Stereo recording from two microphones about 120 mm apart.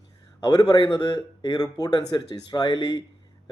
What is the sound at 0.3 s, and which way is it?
Speech, 35° left (ahead or behind).